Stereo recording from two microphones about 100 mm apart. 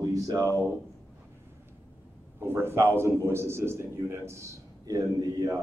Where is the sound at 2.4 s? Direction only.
25° right (ahead or behind).